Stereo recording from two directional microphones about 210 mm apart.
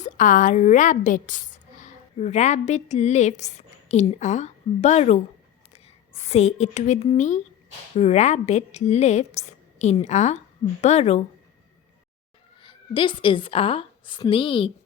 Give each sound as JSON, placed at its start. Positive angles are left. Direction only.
{"t": 0.0, "sound": "a woman's voice", "side_deg": 40}
{"t": 6.2, "sound": "a woman's voice", "side_deg": 30}
{"t": 12.6, "sound": "a woman's voice", "side_deg": 25}